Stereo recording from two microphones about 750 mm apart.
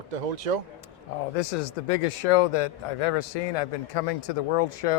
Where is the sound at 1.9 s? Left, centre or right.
Left.